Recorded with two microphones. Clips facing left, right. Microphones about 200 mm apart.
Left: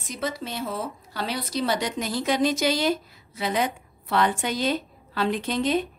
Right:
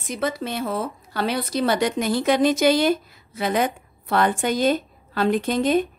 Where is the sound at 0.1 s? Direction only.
60° right (ahead or behind).